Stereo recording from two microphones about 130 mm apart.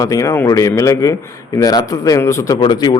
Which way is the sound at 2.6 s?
35° left (ahead or behind).